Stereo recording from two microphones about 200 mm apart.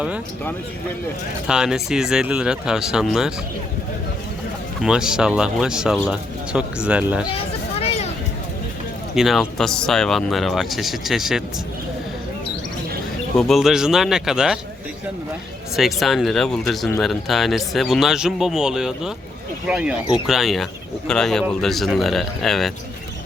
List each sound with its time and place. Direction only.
1.5 s speech: 5° right (ahead or behind)
4.8 s speech: 5° right (ahead or behind)
7.3 s a sound: 30° left (ahead or behind)
9.1 s speech: centre (ahead or behind)
13.3 s speech: centre (ahead or behind)
15.7 s speech: centre (ahead or behind)